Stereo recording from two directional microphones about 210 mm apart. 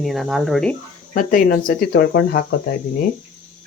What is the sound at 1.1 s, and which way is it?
Speech, 40° left (ahead or behind).